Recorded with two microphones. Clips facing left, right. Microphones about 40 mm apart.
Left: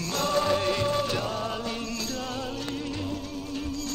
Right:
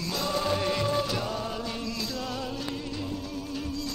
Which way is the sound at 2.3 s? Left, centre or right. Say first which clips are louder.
Left 1 dB; centre.